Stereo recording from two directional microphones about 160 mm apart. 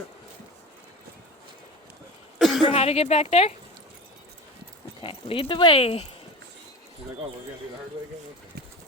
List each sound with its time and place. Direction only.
2.4 s a sound: centre (ahead or behind)
2.6 s a woman's voice: 40° left (ahead or behind)
5.0 s speech: 35° left (ahead or behind)